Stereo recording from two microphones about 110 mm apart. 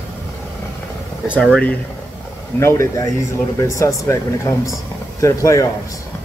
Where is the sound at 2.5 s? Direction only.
25° left (ahead or behind).